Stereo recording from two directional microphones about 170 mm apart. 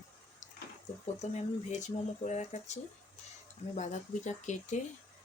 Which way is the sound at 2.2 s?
45° left (ahead or behind).